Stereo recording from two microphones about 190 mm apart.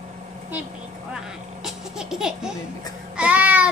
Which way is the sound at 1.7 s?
Centre (ahead or behind).